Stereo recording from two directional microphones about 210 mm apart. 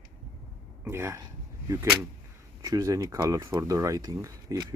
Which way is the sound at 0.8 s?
10° right (ahead or behind).